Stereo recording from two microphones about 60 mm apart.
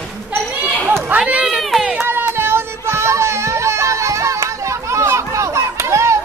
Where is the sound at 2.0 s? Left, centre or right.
Right.